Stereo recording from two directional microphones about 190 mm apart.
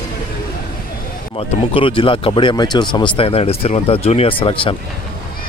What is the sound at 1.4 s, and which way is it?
Speech, 30° left (ahead or behind).